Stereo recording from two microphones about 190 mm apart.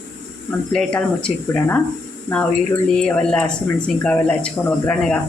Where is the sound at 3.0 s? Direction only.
5° left (ahead or behind).